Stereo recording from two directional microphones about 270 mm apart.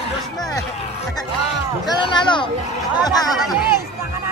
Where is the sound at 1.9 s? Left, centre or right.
Centre.